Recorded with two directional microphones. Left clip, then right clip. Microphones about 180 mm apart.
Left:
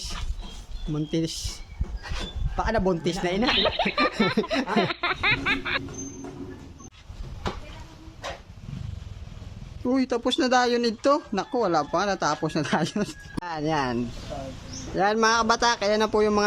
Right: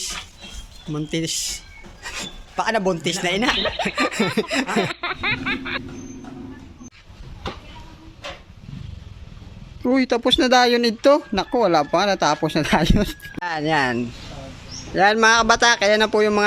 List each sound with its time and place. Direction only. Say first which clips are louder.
0.9 s speech: right 4 dB; centre (ahead or behind)
9.8 s speech: right 6 dB; 20° right (ahead or behind)